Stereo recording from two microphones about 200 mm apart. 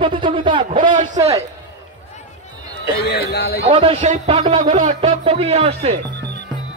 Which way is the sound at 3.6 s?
30° right (ahead or behind).